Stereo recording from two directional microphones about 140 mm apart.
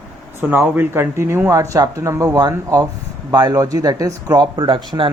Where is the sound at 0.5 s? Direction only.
15° right (ahead or behind).